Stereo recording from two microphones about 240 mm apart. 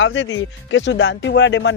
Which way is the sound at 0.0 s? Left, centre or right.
Left.